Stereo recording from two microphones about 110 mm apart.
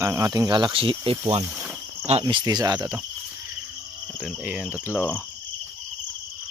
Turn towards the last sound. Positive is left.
turn(degrees=-10)  # may be behind; listen again after turning